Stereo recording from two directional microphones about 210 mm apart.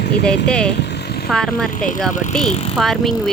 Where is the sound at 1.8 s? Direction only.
40° left (ahead or behind).